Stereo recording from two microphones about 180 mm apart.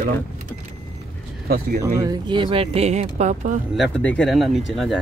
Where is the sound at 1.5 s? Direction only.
50° right (ahead or behind).